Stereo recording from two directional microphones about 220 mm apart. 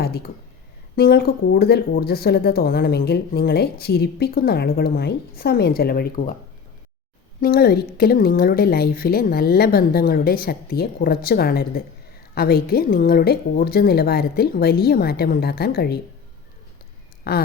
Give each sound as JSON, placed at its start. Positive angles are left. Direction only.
{"t": 0.0, "sound": "a woman's voice", "side_deg": 45}
{"t": 7.4, "sound": "a woman's voice", "side_deg": 45}
{"t": 17.3, "sound": "a woman's voice", "side_deg": 45}